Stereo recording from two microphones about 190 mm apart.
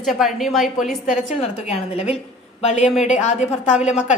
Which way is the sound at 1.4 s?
35° left (ahead or behind).